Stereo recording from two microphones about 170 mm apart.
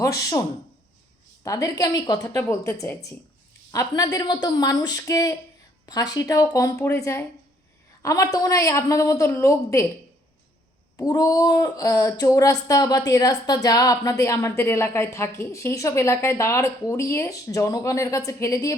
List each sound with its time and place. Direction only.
0.0 s speech: 20° left (ahead or behind)
1.5 s a woman's voice: 20° left (ahead or behind)
10.9 s speech: 20° left (ahead or behind)